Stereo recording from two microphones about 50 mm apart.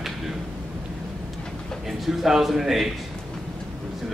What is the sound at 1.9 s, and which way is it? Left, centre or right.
A man's voice, centre.